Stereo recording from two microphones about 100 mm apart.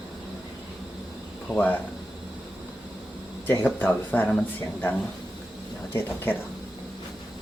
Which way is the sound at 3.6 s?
20° left (ahead or behind).